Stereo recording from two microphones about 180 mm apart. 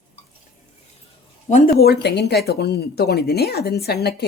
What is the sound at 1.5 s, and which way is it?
A woman's voice, 60° left (ahead or behind).